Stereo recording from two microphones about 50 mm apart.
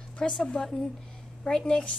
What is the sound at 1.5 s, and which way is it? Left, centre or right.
Speech, centre.